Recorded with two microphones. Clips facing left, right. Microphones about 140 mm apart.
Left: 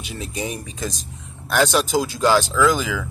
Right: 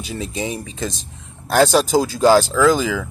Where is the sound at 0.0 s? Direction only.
30° right (ahead or behind).